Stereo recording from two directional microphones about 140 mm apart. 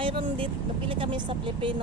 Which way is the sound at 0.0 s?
40° right (ahead or behind).